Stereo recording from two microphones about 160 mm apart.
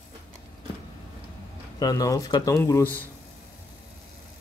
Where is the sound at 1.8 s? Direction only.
20° left (ahead or behind).